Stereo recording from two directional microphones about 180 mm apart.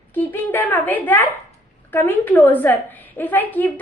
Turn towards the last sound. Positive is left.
turn(degrees=10)  # may be behind; listen again after turning